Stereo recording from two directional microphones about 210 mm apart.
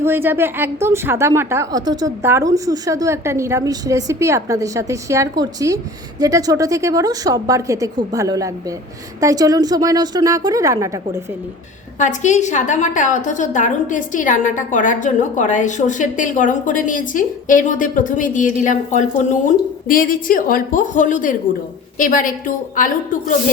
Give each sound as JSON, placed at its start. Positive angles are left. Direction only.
{"t": 0.0, "sound": "a woman's voice", "side_deg": -10}
{"t": 11.9, "sound": "a woman's voice", "side_deg": 35}